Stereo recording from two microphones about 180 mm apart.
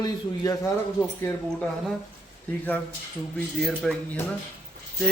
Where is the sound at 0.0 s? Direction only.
20° left (ahead or behind).